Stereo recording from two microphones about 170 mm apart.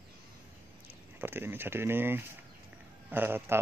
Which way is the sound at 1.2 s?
15° right (ahead or behind).